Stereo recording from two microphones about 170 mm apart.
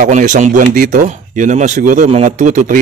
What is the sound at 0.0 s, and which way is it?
Speech, 50° right (ahead or behind).